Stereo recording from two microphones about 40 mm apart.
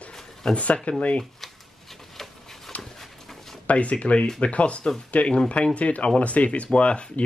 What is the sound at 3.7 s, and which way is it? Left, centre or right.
Speech, left.